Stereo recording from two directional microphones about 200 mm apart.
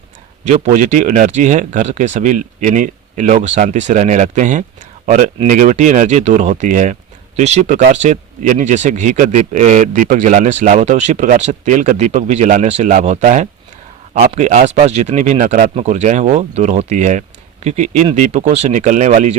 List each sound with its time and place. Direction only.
0.4 s speech: 35° right (ahead or behind)